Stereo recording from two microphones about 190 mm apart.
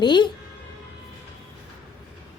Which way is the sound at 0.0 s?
25° left (ahead or behind).